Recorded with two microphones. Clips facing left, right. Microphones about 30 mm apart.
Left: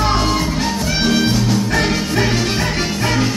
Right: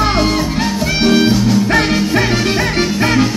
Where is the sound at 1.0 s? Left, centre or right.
Centre.